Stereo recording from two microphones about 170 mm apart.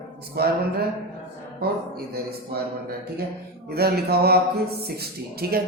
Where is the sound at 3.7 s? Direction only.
65° right (ahead or behind).